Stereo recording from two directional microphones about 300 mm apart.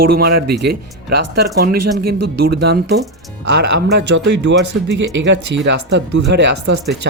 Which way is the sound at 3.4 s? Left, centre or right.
Right.